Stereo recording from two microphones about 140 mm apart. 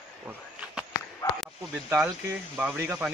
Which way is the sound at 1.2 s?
20° left (ahead or behind).